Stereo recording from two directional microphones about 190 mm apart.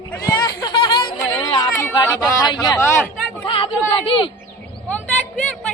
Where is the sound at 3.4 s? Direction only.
30° left (ahead or behind).